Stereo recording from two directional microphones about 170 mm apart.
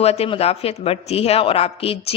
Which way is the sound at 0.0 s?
35° left (ahead or behind).